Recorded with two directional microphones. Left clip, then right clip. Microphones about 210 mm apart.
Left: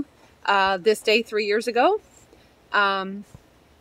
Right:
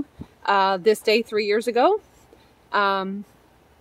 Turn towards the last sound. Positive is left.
turn(degrees=-5)  # may be behind; listen again after turning